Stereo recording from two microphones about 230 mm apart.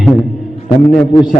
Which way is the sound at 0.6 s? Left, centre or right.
Left.